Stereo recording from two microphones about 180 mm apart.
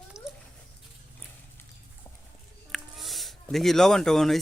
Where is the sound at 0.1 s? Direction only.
15° left (ahead or behind).